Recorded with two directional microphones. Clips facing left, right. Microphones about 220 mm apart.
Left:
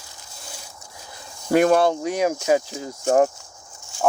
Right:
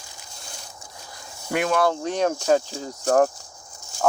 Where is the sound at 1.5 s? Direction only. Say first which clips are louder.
Left 6 dB; 40° left (ahead or behind).